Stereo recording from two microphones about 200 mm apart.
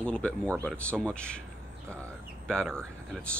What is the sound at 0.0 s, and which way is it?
Speech, 5° left (ahead or behind).